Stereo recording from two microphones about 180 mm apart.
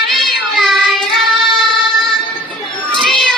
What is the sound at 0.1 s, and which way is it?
Child singing, centre (ahead or behind).